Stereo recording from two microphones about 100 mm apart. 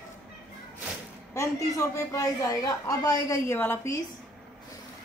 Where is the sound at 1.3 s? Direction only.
35° left (ahead or behind).